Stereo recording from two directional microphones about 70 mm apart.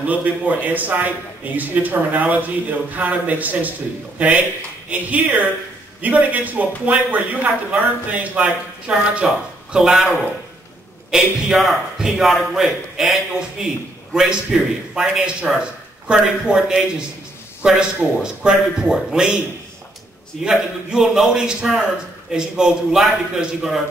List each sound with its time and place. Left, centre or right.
0.0 s a man's voice: right
4.8 s a man's voice: centre
20.4 s a man's voice: centre